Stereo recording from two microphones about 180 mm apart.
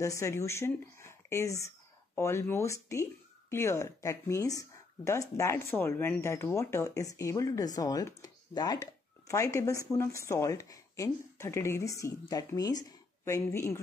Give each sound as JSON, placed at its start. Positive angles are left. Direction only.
{"t": 0.0, "sound": "speech", "side_deg": 15}